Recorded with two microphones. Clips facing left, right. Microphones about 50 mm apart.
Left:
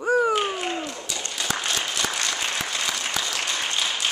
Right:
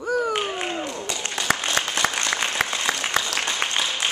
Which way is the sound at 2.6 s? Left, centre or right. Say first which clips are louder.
Right 6 dB; right.